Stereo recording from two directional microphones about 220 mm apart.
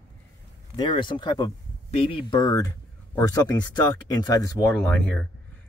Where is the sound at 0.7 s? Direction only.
20° left (ahead or behind).